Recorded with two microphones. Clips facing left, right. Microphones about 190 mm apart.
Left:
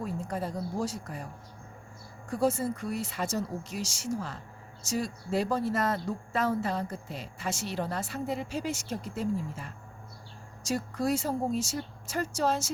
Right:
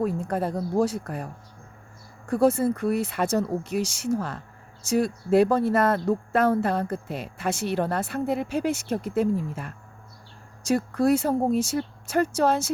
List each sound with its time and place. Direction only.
0.0 s speech: 60° right (ahead or behind)